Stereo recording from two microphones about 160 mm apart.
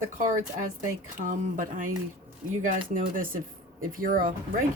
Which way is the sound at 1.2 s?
55° right (ahead or behind).